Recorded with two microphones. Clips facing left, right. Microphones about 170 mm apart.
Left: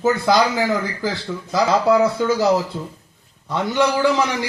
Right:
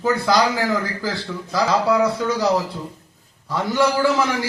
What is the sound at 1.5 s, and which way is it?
Speech, 25° left (ahead or behind).